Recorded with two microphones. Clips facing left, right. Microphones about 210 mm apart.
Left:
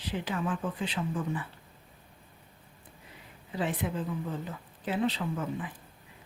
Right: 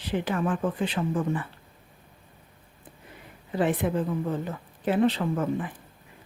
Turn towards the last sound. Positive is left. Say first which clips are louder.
# right 7 dB
turn(degrees=-55)  # may be behind; listen again after turning